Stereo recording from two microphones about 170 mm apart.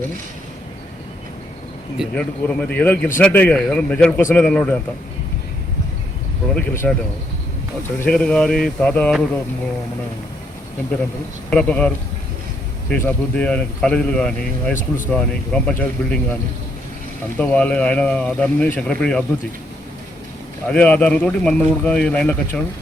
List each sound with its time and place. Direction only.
2.1 s speech: 5° left (ahead or behind)
6.5 s speech: 10° left (ahead or behind)
7.9 s speech: 5° left (ahead or behind)
11.5 s speech: 5° left (ahead or behind)
12.9 s speech: 10° left (ahead or behind)
14.8 s speech: 50° left (ahead or behind)
15.1 s speech: 5° left (ahead or behind)
20.7 s speech: 5° left (ahead or behind)